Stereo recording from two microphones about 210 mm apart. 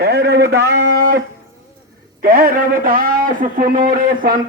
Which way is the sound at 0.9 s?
45° right (ahead or behind).